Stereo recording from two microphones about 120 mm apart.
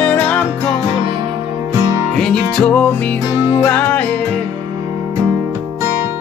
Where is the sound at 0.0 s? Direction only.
10° left (ahead or behind).